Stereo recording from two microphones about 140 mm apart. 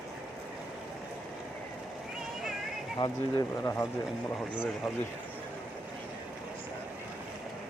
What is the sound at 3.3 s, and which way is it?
Speech, 20° left (ahead or behind).